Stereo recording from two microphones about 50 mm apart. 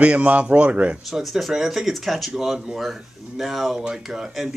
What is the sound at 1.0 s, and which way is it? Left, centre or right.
Speech, centre.